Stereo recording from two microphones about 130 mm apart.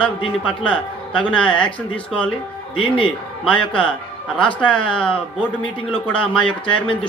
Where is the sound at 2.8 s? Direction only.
45° left (ahead or behind).